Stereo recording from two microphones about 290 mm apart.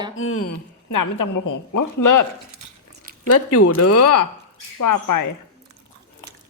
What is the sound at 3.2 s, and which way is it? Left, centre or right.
Speech, left.